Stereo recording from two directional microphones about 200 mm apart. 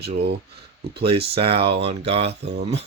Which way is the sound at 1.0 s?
30° right (ahead or behind).